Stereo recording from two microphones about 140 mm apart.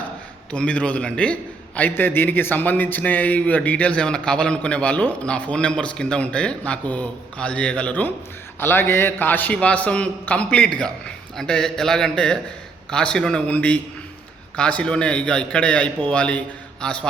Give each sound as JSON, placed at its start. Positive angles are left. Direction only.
{"t": 0.5, "sound": "a man's voice", "side_deg": 10}